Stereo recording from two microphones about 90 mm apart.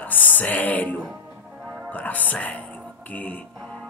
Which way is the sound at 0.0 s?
20° left (ahead or behind).